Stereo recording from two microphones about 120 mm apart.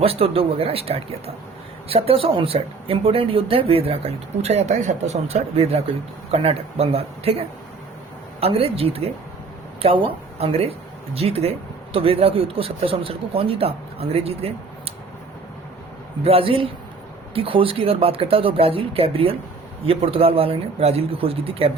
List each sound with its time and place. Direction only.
0.0 s speech: 55° right (ahead or behind)
16.2 s speech: 50° right (ahead or behind)